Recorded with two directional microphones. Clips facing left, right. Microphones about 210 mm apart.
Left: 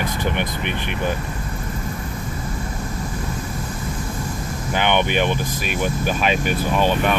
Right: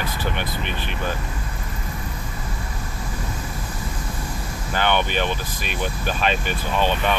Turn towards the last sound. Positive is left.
turn(degrees=10)  # may be behind; listen again after turning